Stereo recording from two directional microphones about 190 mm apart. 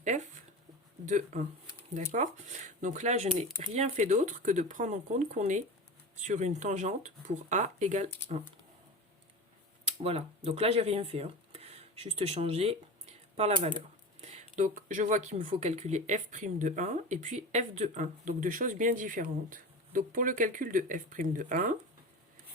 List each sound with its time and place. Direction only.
0.0 s speech: 40° right (ahead or behind)
10.0 s speech: 30° right (ahead or behind)